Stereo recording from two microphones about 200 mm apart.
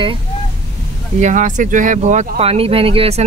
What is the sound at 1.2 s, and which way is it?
Speech, 40° right (ahead or behind).